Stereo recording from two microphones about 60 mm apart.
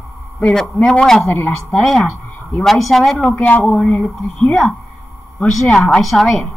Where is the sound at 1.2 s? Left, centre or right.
Left.